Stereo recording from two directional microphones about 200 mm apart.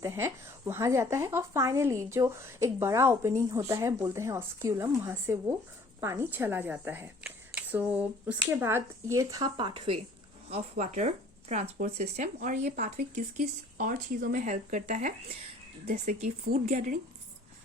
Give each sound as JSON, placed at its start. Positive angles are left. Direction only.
{"t": 0.0, "sound": "a woman's voice", "side_deg": -15}